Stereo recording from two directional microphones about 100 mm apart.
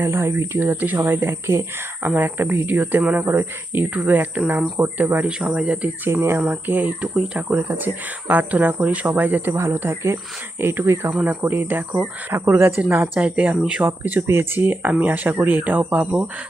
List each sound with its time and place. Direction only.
0.0 s speech: 25° right (ahead or behind); by 5.9 s 10° right (ahead or behind)
6.1 s speech: 25° right (ahead or behind)
11.1 s speech: 15° right (ahead or behind)